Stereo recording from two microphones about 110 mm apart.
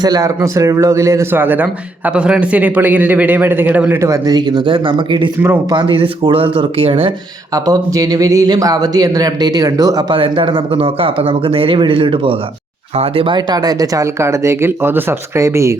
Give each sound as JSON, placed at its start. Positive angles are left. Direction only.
{"t": 0.0, "sound": "a man's voice", "side_deg": -35}
{"t": 4.3, "sound": "speech", "side_deg": -40}
{"t": 7.5, "sound": "speech", "side_deg": -35}
{"t": 10.1, "sound": "speech", "side_deg": -50}
{"t": 13.3, "sound": "speech", "side_deg": -40}